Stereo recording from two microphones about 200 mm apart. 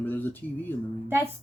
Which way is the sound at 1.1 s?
10° right (ahead or behind).